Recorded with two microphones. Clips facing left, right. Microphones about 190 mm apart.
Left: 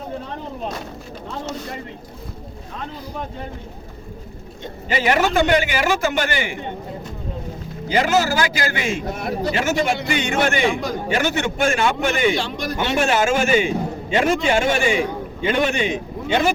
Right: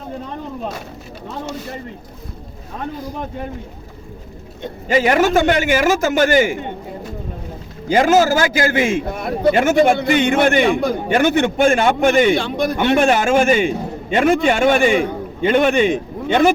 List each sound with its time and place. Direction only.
4.6 s a man's voice: 45° right (ahead or behind)
7.9 s a man's voice: 45° right (ahead or behind)